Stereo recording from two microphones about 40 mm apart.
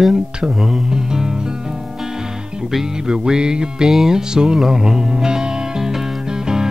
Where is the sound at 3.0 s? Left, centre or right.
Centre.